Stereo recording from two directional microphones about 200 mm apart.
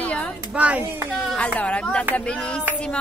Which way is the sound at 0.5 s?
5° right (ahead or behind).